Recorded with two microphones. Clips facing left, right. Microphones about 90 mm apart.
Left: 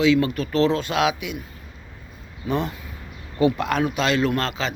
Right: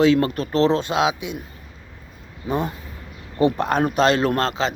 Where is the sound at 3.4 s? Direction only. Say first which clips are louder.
Right 1 dB; 35° right (ahead or behind).